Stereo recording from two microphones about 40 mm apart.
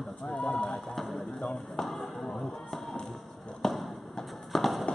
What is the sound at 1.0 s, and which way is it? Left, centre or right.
Speech, centre.